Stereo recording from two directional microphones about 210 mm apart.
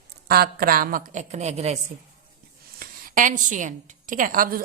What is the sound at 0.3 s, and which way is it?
A woman's voice, 45° right (ahead or behind).